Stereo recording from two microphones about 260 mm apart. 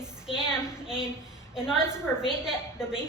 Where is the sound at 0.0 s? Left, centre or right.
Centre.